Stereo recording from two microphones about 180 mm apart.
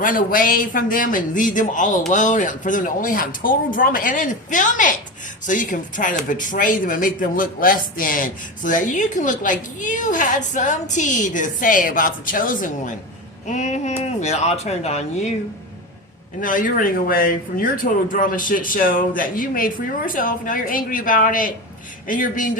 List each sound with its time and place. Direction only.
0.0 s speech: 50° left (ahead or behind)
16.4 s speech: 50° left (ahead or behind)